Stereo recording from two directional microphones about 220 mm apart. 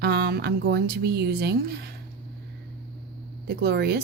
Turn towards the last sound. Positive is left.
turn(degrees=-45)  # may be behind; listen again after turning